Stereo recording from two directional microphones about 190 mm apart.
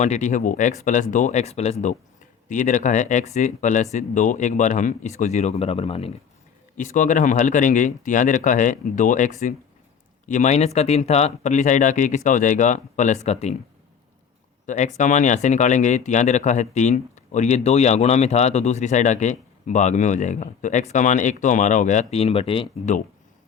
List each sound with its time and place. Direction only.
0.0 s speech: 40° left (ahead or behind)
6.7 s speech: 40° left (ahead or behind)
14.7 s speech: 40° left (ahead or behind)